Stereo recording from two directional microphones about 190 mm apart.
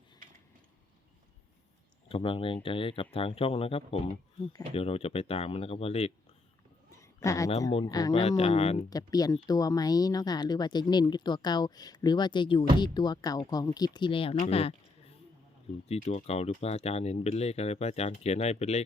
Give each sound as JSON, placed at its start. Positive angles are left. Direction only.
{"t": 2.0, "sound": "speech", "side_deg": 30}
{"t": 7.0, "sound": "a sound", "side_deg": 15}
{"t": 7.7, "sound": "speech", "side_deg": 25}
{"t": 8.1, "sound": "speech", "side_deg": 35}
{"t": 8.9, "sound": "speech", "side_deg": 20}